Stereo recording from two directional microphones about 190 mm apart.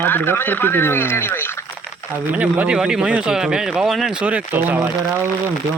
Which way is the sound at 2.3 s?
5° right (ahead or behind).